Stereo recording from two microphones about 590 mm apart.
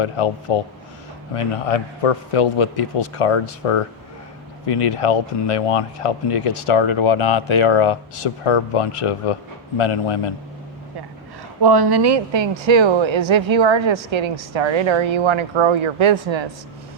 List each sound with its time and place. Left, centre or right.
0.0 s speech: left
11.6 s speech: right